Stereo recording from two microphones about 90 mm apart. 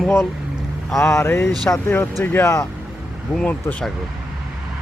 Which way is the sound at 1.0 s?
30° left (ahead or behind).